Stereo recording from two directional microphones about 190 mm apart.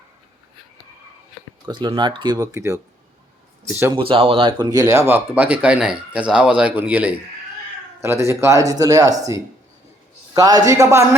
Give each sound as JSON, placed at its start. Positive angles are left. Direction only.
{"t": 1.6, "sound": "speech", "side_deg": -20}
{"t": 3.9, "sound": "speech", "side_deg": -30}